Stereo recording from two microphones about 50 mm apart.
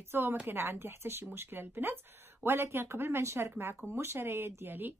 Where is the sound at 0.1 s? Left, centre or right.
Right.